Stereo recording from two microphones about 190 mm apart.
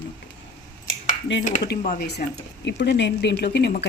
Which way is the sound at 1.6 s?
55° left (ahead or behind).